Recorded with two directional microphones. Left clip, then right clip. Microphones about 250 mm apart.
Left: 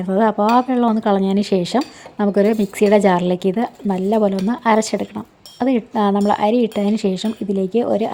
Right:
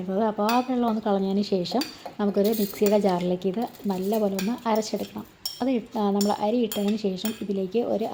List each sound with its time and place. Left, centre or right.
0.1 s speech: left